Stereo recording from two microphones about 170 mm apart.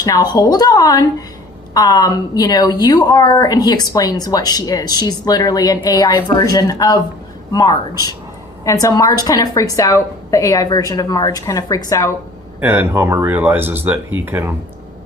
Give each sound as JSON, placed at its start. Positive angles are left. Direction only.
{"t": 0.0, "sound": "a woman's voice", "side_deg": 20}
{"t": 12.5, "sound": "speech", "side_deg": -10}